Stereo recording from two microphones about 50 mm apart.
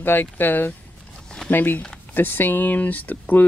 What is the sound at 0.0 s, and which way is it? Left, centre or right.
A man's voice, left.